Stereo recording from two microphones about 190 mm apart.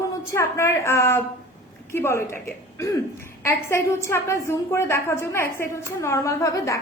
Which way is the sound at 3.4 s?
15° left (ahead or behind).